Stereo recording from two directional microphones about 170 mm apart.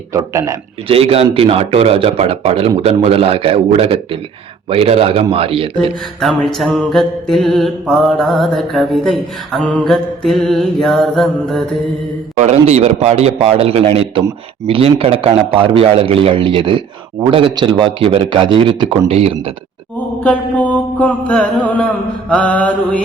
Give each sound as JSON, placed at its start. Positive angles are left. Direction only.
{"t": 0.1, "sound": "speech", "side_deg": -20}
{"t": 0.9, "sound": "speech", "side_deg": -35}
{"t": 6.1, "sound": "mantra", "side_deg": 0}
{"t": 12.4, "sound": "speech", "side_deg": -40}
{"t": 20.2, "sound": "mantra", "side_deg": 10}